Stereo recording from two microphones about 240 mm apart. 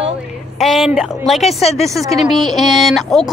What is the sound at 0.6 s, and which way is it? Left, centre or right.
Speech, centre.